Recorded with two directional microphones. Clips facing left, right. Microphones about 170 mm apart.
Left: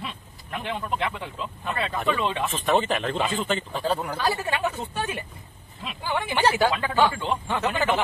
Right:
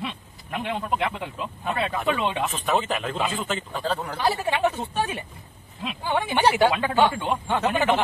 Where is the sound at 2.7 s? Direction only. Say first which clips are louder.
Left 3 dB; 5° right (ahead or behind).